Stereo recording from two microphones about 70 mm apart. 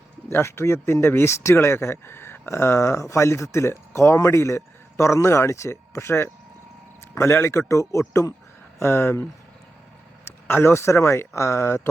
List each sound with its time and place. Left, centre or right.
0.3 s speech: left
8.8 s speech: left
10.5 s speech: left